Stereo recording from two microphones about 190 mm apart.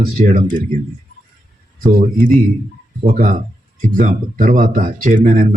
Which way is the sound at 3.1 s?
45° right (ahead or behind).